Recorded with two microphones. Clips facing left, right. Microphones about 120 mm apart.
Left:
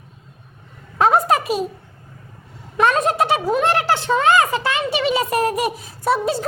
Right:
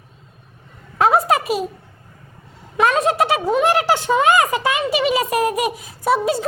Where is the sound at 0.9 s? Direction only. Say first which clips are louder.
Even; 5° right (ahead or behind).